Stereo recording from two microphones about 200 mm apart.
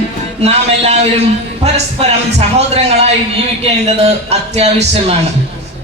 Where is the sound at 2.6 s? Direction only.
30° right (ahead or behind).